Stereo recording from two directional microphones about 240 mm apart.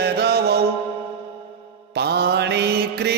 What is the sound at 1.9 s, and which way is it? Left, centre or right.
Mantra, right.